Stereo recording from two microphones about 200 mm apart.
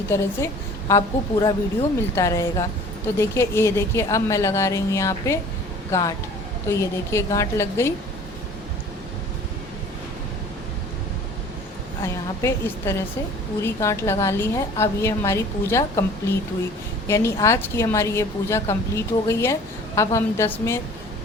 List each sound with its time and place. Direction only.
0.1 s a woman's voice: 15° left (ahead or behind)
12.0 s a woman's voice: 10° left (ahead or behind)
17.1 s a woman's voice: 15° left (ahead or behind)